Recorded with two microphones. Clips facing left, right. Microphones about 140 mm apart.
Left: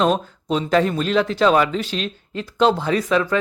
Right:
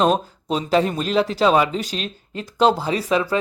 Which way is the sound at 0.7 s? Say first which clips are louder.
Even; 10° right (ahead or behind).